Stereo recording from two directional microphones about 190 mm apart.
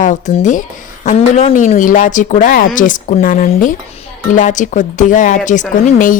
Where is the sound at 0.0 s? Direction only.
40° left (ahead or behind).